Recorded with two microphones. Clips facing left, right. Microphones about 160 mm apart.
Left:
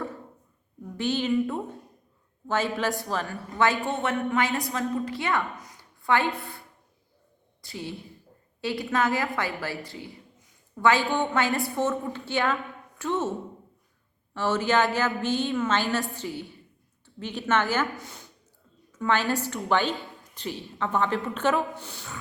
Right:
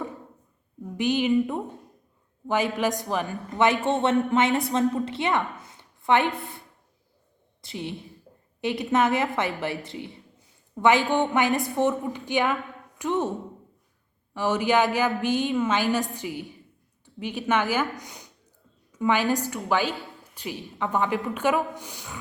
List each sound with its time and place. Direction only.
0.9 s a woman's voice: 15° right (ahead or behind)
7.6 s a woman's voice: 20° right (ahead or behind)
14.3 s a woman's voice: 15° right (ahead or behind)